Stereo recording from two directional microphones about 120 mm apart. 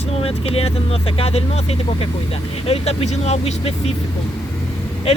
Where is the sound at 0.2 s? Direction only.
55° left (ahead or behind).